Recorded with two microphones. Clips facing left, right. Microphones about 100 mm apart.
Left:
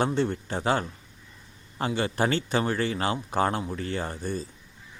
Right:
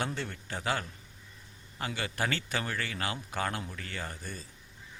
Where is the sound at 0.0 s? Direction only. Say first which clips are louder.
Left 10 dB; 30° left (ahead or behind).